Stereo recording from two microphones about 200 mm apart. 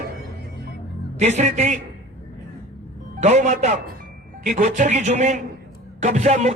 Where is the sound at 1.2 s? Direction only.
35° right (ahead or behind).